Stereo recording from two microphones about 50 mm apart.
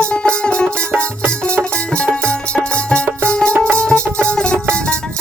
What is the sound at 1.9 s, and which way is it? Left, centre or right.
Music, left.